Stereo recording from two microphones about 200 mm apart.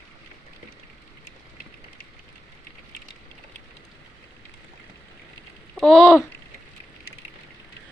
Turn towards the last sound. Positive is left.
turn(degrees=0)  # may be behind; listen again after turning